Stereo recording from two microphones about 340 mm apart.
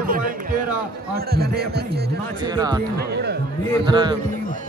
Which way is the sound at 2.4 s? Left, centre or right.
Centre.